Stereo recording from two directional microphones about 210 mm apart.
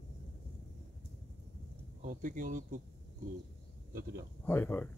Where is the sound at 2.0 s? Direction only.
40° right (ahead or behind).